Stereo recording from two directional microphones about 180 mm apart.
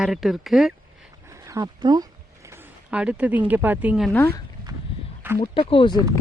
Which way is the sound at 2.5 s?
10° right (ahead or behind).